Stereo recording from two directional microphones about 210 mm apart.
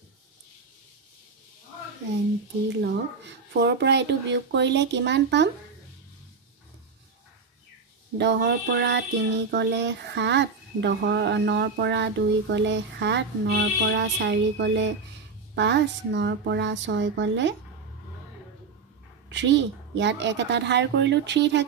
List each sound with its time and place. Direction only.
2.8 s speech: 55° right (ahead or behind)
8.2 s speech: 55° right (ahead or behind)
19.2 s speech: 60° right (ahead or behind)